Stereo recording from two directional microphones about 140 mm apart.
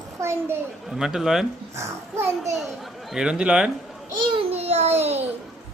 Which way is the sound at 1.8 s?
20° right (ahead or behind).